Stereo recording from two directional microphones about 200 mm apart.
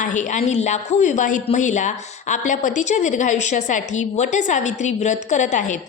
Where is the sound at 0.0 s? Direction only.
40° left (ahead or behind).